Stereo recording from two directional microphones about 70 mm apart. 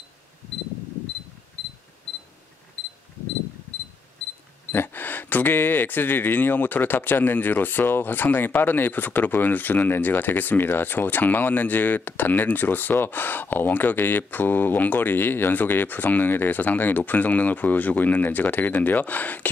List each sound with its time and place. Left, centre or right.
4.7 s speech: left